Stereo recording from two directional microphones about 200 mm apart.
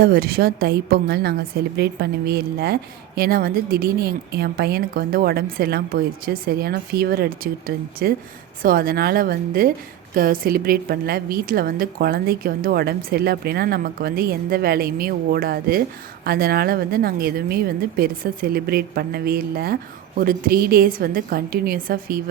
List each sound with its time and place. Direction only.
0.0 s speech: 50° right (ahead or behind)